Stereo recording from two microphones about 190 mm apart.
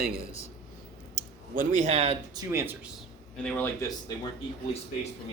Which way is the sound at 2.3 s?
15° right (ahead or behind).